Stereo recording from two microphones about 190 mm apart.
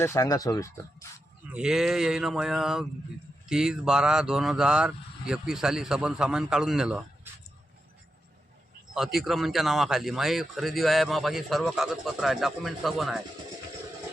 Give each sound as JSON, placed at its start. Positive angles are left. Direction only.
{"t": 0.0, "sound": "speech", "side_deg": 15}
{"t": 1.5, "sound": "speech", "side_deg": -5}
{"t": 8.9, "sound": "speech", "side_deg": 0}